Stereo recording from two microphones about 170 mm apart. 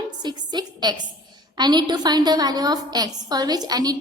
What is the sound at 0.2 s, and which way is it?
A woman's voice, 25° right (ahead or behind).